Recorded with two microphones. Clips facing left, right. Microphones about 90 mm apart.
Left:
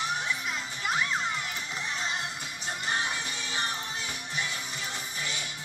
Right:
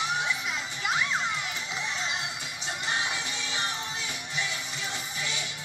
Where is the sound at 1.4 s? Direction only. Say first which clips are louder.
Right 1 dB; 45° left (ahead or behind).